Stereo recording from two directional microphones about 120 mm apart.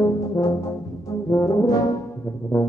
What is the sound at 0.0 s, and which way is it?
Brass instrument, 25° left (ahead or behind).